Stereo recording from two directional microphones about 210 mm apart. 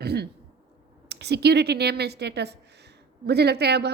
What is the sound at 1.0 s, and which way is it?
A woman's voice, 50° right (ahead or behind).